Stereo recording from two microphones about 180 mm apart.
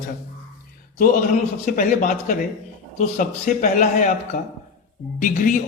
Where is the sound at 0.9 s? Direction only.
50° left (ahead or behind).